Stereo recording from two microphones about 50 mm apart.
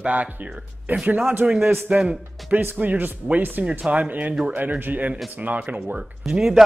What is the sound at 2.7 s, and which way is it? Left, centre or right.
Speech, right.